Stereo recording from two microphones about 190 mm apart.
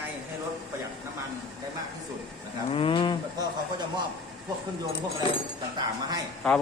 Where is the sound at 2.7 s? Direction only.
30° left (ahead or behind).